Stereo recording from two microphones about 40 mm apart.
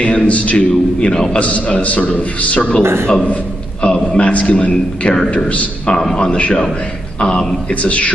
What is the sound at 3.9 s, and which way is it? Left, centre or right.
Speech, centre.